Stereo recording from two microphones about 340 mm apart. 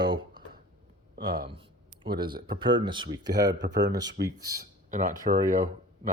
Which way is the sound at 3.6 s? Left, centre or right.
Right.